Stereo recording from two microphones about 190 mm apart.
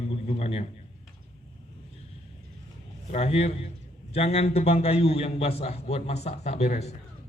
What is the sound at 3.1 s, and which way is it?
A man's voice, 30° left (ahead or behind).